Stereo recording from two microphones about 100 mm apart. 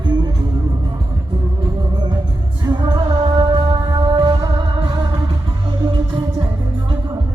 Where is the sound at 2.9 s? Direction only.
45° right (ahead or behind).